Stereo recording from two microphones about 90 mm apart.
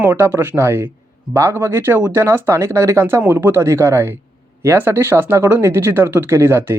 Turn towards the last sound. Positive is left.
turn(degrees=-25)  # may be behind; listen again after turning